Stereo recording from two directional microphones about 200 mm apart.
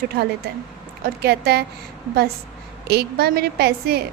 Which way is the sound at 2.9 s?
55° right (ahead or behind).